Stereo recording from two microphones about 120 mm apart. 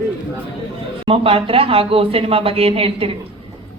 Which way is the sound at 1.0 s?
50° right (ahead or behind).